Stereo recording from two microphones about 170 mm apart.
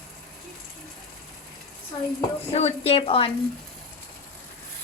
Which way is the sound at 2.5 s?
35° left (ahead or behind).